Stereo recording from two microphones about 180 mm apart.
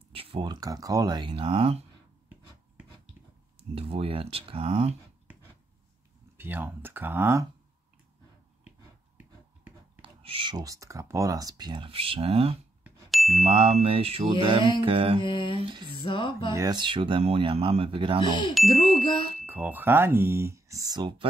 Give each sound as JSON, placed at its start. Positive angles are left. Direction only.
{"t": 0.1, "sound": "speech", "side_deg": -30}
{"t": 3.5, "sound": "speech", "side_deg": -30}
{"t": 6.3, "sound": "speech", "side_deg": -10}
{"t": 10.0, "sound": "speech", "side_deg": -30}
{"t": 12.8, "sound": "ding", "side_deg": 0}
{"t": 13.4, "sound": "speech", "side_deg": -30}
{"t": 15.1, "sound": "music", "side_deg": 25}
{"t": 15.6, "sound": "speech", "side_deg": -25}
{"t": 16.0, "sound": "music", "side_deg": 25}
{"t": 16.5, "sound": "speech", "side_deg": -25}
{"t": 18.5, "sound": "music", "side_deg": 0}
{"t": 18.9, "sound": "music", "side_deg": 30}
{"t": 19.4, "sound": "speech", "side_deg": -10}